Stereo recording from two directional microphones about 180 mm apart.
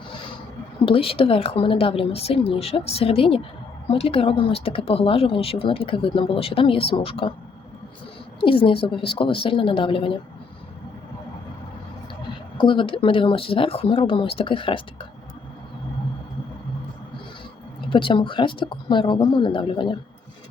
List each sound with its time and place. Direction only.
0.9 s speech: 30° left (ahead or behind)
8.4 s speech: 30° left (ahead or behind)
12.5 s speech: 25° left (ahead or behind)
17.8 s speech: 25° left (ahead or behind)